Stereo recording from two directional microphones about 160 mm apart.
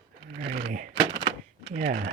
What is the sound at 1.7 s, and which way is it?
Speech, 50° right (ahead or behind).